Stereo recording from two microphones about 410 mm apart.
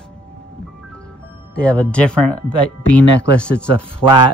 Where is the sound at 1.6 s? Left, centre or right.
Centre.